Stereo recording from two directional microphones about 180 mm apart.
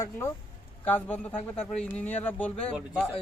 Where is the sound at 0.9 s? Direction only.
10° left (ahead or behind).